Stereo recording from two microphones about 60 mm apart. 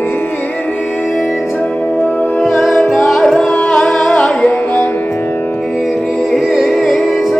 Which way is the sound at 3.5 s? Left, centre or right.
Centre.